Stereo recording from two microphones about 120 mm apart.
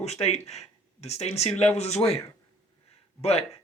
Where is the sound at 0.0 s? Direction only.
60° left (ahead or behind).